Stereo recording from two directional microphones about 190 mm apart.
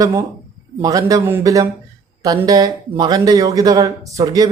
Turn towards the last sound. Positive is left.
turn(degrees=-20)  # may be behind; listen again after turning